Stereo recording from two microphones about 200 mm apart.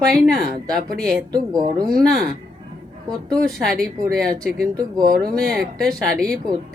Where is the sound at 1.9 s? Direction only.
Centre (ahead or behind).